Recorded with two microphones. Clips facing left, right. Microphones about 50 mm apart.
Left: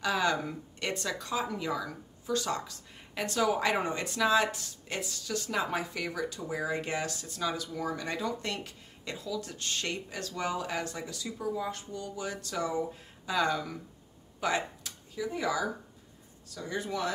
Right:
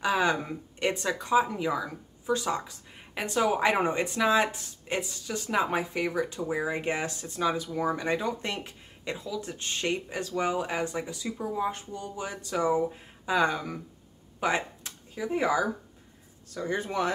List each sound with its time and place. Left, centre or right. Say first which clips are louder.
0.0 s speech: right 3 dB; right